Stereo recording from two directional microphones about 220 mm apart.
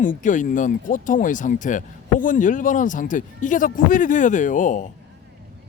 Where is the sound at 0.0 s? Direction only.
35° left (ahead or behind).